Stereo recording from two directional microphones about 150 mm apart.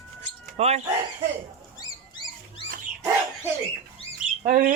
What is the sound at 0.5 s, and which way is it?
Speech, 45° right (ahead or behind).